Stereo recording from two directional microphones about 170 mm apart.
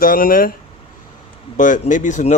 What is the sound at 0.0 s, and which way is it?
Speech, 55° left (ahead or behind).